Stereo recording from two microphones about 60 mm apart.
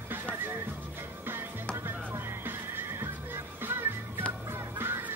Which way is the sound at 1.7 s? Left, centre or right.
Right.